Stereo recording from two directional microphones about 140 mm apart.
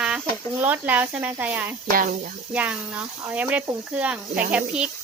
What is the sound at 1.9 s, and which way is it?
Speech, 80° right.